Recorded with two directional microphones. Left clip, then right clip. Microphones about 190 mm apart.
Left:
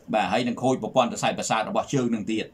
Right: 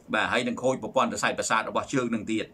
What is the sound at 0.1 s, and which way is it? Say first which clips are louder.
Speech: left 2 dB; 15° left (ahead or behind).